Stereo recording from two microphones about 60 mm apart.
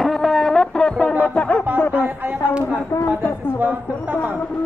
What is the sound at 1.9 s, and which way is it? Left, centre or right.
Speech, right.